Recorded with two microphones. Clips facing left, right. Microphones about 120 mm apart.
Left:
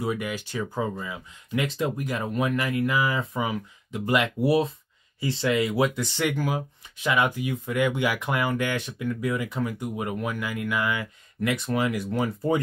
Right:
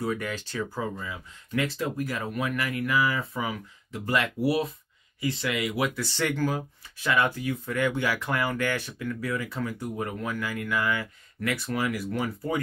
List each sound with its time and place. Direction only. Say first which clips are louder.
0.0 s speech: left 1 dB; 15° left (ahead or behind)